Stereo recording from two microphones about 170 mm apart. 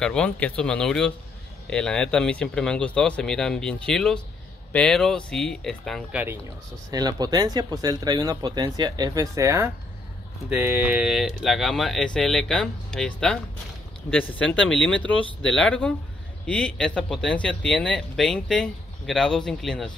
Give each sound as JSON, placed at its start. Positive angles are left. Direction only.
{"t": 0.0, "sound": "speech", "side_deg": 5}
{"t": 6.9, "sound": "speech", "side_deg": -25}
{"t": 14.9, "sound": "speech", "side_deg": 10}